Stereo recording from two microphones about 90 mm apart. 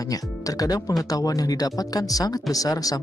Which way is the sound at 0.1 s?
40° left (ahead or behind).